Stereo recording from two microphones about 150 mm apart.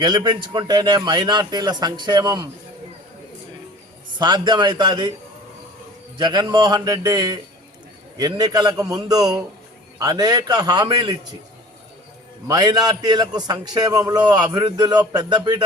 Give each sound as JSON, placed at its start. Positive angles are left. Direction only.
{"t": 0.0, "sound": "a man's voice", "side_deg": -30}
{"t": 4.2, "sound": "speech", "side_deg": -30}
{"t": 6.1, "sound": "a man's voice", "side_deg": -30}
{"t": 12.5, "sound": "a man's voice", "side_deg": -25}